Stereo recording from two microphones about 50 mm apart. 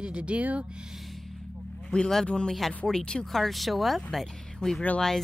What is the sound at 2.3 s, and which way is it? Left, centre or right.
Speech, left.